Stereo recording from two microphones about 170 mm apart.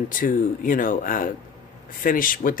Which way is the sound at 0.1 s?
50° left (ahead or behind).